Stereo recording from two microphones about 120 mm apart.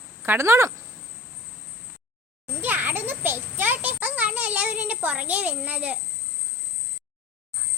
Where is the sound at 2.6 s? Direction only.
15° right (ahead or behind).